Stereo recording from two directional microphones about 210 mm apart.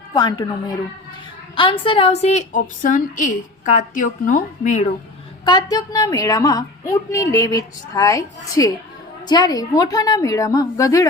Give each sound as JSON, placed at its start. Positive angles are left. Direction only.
{"t": 0.1, "sound": "a woman's voice", "side_deg": 20}
{"t": 1.5, "sound": "a woman's voice", "side_deg": 25}
{"t": 5.5, "sound": "a woman's voice", "side_deg": 20}